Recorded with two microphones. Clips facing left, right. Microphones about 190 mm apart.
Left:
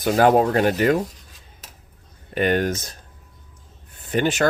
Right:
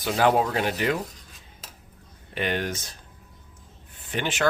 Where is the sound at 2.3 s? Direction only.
45° left (ahead or behind).